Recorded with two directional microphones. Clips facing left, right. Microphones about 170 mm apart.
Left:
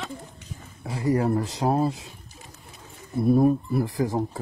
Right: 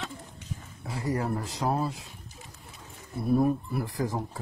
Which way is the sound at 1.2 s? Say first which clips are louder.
Left 6 dB; 35° left (ahead or behind).